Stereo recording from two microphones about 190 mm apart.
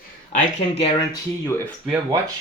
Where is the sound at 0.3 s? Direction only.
35° left (ahead or behind); by 1.6 s 20° left (ahead or behind).